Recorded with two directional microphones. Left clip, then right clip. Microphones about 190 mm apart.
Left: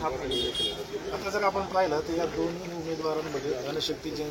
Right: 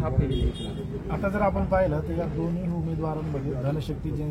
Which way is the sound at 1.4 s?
20° right (ahead or behind).